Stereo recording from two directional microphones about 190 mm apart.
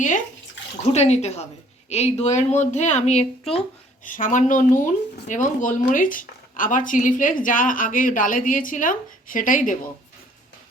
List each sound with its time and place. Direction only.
0.6 s bathtub: 70° left (ahead or behind)
0.9 s a woman's voice: 35° left (ahead or behind)